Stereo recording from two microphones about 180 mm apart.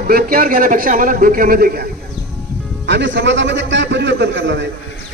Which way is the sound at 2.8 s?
85° right.